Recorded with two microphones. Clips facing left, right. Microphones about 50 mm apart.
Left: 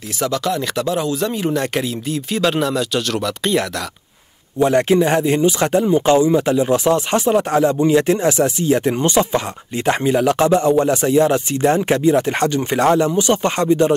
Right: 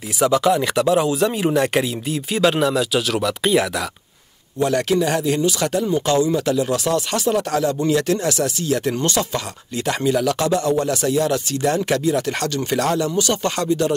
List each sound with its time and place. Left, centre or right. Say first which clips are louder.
0.2 s speech: right 4 dB; centre
4.6 s speech: left 4 dB; left